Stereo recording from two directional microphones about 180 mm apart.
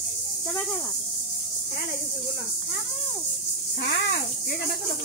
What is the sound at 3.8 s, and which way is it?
Speech, 65° left (ahead or behind).